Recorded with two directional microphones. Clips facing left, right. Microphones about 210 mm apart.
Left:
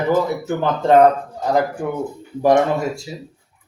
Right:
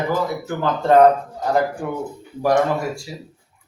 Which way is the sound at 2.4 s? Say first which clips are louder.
Left 3 dB; 25° left (ahead or behind).